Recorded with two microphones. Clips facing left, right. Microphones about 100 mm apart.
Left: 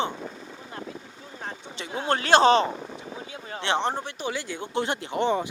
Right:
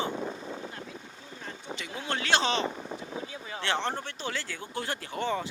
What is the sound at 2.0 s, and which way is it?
Speech, 45° left (ahead or behind).